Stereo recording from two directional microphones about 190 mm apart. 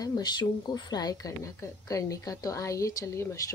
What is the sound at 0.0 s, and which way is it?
Speech, 20° left (ahead or behind).